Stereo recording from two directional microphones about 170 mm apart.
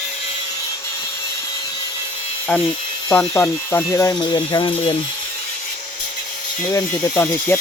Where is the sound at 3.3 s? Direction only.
15° left (ahead or behind).